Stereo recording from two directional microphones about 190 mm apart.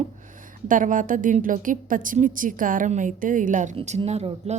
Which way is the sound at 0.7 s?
45° right (ahead or behind).